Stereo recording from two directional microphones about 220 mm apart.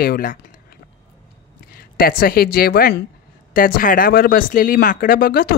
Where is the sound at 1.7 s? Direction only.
40° left (ahead or behind).